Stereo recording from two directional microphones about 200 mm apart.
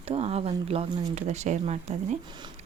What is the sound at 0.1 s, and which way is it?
Speech, 30° right (ahead or behind).